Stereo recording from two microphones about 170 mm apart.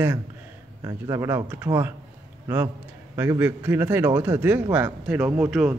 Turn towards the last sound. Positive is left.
turn(degrees=-5)  # may be behind; listen again after turning